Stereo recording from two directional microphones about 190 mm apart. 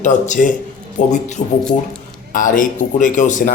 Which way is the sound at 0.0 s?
40° left (ahead or behind).